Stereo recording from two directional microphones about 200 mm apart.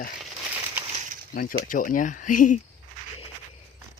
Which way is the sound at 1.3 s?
45° left (ahead or behind).